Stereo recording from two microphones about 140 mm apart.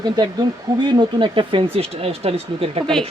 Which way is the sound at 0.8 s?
35° right (ahead or behind).